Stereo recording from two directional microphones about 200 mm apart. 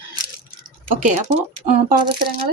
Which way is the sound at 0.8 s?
35° right (ahead or behind).